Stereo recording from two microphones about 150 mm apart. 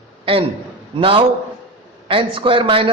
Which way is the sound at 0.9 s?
35° right (ahead or behind).